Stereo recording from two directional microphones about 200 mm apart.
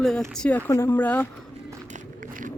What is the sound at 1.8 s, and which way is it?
Run, 40° right (ahead or behind).